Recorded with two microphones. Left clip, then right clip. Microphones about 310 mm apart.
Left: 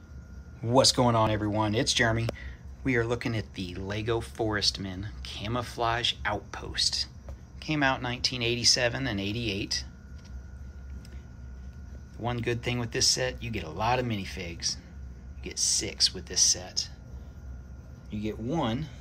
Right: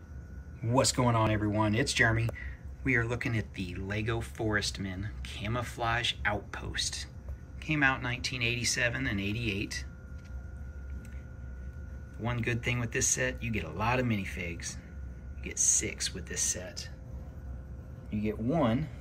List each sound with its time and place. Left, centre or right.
0.6 s speech: centre
12.2 s speech: centre
18.1 s speech: centre